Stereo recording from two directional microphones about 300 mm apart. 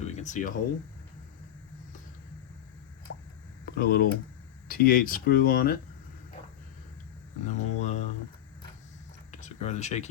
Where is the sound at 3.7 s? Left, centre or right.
Left.